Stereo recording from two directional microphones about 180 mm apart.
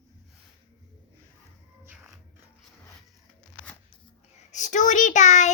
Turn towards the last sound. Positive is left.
turn(degrees=40)  # may be behind; listen again after turning